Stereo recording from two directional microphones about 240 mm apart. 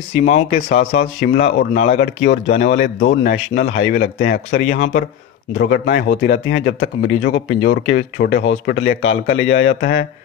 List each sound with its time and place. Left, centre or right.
0.2 s speech: left
2.7 s a man's voice: left
5.6 s a man's voice: left